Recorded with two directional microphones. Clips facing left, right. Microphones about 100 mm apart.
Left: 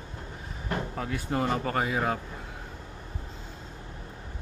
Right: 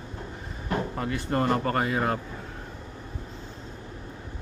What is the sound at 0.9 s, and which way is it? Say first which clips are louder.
Speech: right 2 dB; centre (ahead or behind).